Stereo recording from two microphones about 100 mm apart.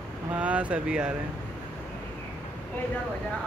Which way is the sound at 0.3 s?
15° right (ahead or behind).